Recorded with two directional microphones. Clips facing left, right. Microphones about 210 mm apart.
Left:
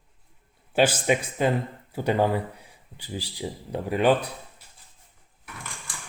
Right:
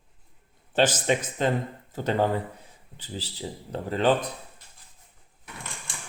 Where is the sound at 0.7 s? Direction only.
10° left (ahead or behind).